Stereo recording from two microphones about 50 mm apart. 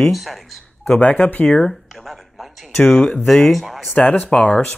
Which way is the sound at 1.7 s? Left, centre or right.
Centre.